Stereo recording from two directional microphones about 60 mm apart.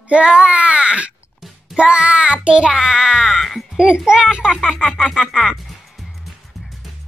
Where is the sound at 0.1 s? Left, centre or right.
Centre.